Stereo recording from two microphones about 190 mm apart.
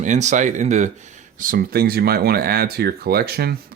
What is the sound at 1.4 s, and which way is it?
Speech, 50° right (ahead or behind).